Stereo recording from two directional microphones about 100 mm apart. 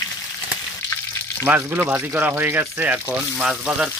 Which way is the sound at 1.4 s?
20° right (ahead or behind).